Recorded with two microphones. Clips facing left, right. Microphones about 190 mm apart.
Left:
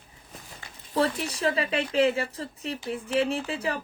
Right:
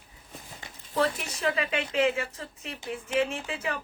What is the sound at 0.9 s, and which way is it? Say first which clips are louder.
Speech: left 2 dB; 35° left (ahead or behind).